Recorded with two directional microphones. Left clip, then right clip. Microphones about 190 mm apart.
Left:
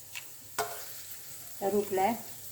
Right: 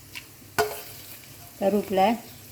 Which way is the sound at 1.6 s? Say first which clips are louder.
Right 7 dB; 50° right (ahead or behind).